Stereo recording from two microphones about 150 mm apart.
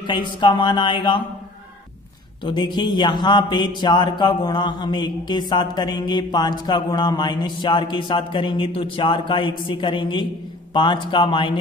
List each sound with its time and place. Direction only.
0.0 s a man's voice: 30° left (ahead or behind)
2.4 s a man's voice: 30° left (ahead or behind)